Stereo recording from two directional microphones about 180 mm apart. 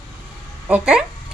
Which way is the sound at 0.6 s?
5° right (ahead or behind).